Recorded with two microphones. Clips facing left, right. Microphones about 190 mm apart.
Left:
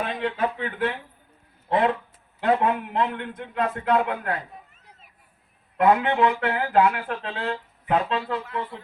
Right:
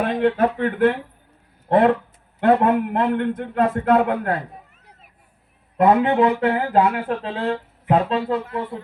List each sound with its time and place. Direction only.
0.0 s a man's voice: 55° right (ahead or behind)
5.7 s speech: 35° right (ahead or behind)